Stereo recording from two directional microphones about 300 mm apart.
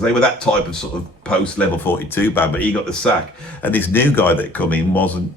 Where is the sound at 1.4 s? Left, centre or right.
Centre.